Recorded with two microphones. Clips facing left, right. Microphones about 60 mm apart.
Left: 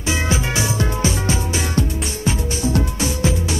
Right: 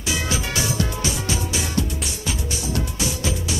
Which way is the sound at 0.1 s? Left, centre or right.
Left.